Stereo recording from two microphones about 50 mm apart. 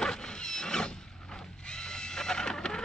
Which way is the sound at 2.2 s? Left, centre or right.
Centre.